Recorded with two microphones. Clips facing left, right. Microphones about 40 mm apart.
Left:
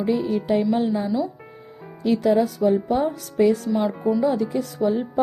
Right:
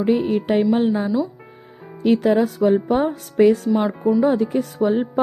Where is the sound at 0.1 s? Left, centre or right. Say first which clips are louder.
Right 3 dB; right.